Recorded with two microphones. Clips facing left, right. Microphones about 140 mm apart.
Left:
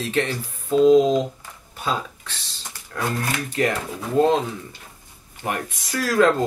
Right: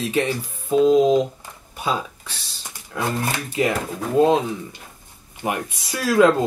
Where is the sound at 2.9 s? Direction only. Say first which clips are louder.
Right 2 dB; 10° right (ahead or behind).